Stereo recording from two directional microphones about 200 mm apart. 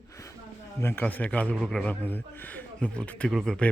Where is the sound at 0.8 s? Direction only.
10° left (ahead or behind).